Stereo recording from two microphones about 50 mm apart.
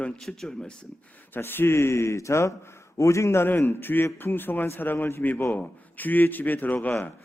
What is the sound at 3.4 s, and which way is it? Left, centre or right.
A man's voice, left.